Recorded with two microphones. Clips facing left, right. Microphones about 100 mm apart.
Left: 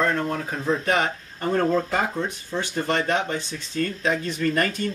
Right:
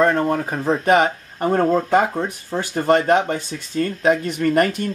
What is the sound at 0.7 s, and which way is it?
Speech, 55° right (ahead or behind).